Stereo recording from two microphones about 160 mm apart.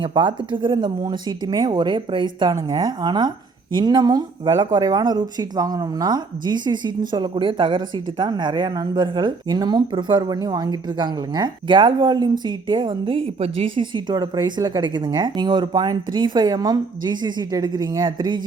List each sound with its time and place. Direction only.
0.0 s speech: 30° right (ahead or behind)